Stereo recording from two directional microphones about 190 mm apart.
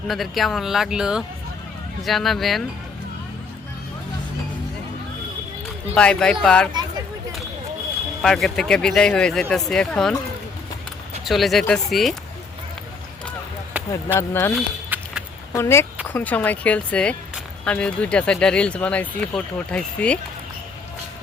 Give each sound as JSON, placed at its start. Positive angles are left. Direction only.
{"t": 0.1, "sound": "speech", "side_deg": 0}
{"t": 5.9, "sound": "speech", "side_deg": 5}
{"t": 8.2, "sound": "speech", "side_deg": 0}
{"t": 11.3, "sound": "speech", "side_deg": 0}
{"t": 13.9, "sound": "speech", "side_deg": 15}
{"t": 14.5, "sound": "a sound", "side_deg": -5}
{"t": 15.5, "sound": "speech", "side_deg": 15}